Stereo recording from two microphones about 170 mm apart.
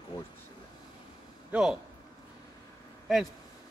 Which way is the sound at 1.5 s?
5° right (ahead or behind).